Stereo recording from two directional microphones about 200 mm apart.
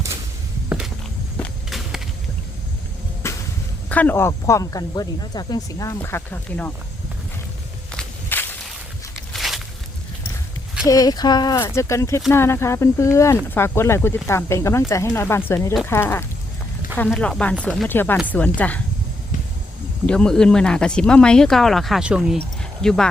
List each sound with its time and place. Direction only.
1.4 s walk: centre (ahead or behind)
3.2 s a sound: 15° left (ahead or behind)
3.8 s speech: 10° left (ahead or behind)
7.9 s walk: 10° left (ahead or behind)
9.3 s a sound: centre (ahead or behind)
10.8 s speech: 20° left (ahead or behind)
20.1 s speech: 5° left (ahead or behind)